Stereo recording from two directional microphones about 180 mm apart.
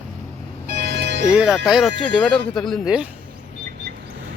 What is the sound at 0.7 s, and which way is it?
Music, 65° right (ahead or behind).